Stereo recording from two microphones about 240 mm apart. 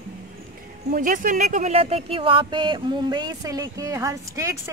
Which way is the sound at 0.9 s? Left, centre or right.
Right.